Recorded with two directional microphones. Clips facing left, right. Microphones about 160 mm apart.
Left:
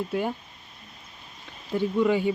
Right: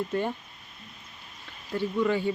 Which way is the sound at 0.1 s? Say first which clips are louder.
Left 1 dB; 10° left (ahead or behind).